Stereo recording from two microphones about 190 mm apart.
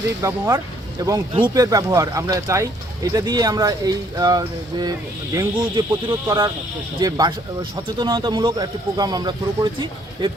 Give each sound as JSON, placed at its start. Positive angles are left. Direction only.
{"t": 0.2, "sound": "speech", "side_deg": -15}